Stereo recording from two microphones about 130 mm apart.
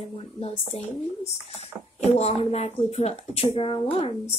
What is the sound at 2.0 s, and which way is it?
A woman's voice, 55° left (ahead or behind).